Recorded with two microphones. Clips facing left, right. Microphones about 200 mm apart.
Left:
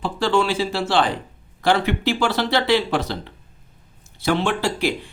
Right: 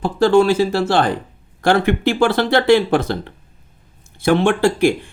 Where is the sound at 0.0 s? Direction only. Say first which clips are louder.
Right 7 dB; 45° right (ahead or behind).